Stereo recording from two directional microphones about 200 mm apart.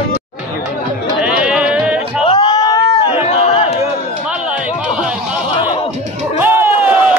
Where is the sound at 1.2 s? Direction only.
5° right (ahead or behind).